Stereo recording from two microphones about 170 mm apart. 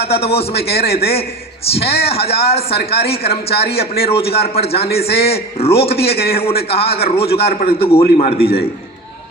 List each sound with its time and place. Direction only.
0.0 s a man's voice: 35° left (ahead or behind)